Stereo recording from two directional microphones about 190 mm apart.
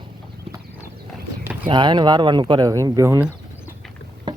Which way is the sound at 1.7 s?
25° right (ahead or behind).